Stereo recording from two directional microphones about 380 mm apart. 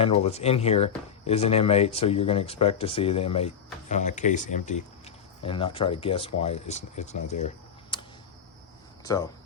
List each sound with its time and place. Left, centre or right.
0.0 s speech: centre
9.0 s speech: centre